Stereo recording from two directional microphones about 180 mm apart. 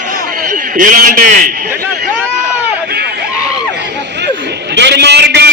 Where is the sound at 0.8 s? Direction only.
45° right (ahead or behind).